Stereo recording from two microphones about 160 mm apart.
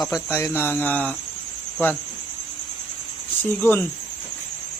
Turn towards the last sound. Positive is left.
turn(degrees=15)  # may be behind; listen again after turning